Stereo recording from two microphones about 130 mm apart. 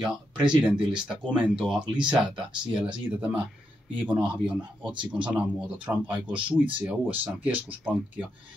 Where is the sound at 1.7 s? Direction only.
40° right (ahead or behind).